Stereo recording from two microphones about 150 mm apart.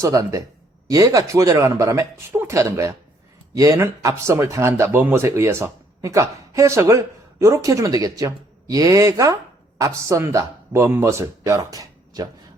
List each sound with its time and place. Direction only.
0.0 s speech: 20° right (ahead or behind)